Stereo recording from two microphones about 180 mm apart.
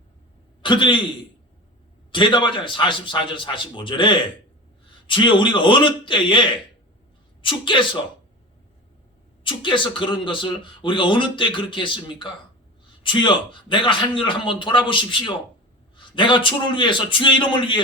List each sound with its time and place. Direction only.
0.6 s a man's voice: 25° left (ahead or behind)
2.1 s speech: 25° left (ahead or behind)
7.4 s speech: 25° left (ahead or behind)
9.4 s speech: 25° left (ahead or behind)